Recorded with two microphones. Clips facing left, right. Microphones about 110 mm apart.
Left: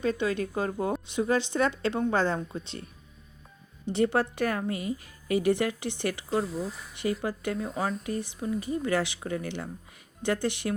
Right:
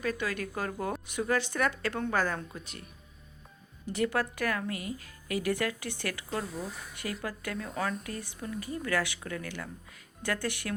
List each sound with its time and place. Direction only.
0.0 s a woman's voice: 25° left (ahead or behind)